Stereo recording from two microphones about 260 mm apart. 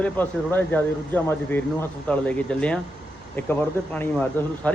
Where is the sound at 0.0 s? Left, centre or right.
Centre.